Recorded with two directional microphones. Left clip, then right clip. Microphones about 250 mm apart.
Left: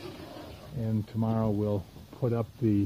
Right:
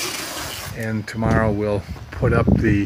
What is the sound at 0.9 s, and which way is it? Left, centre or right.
Speech, centre.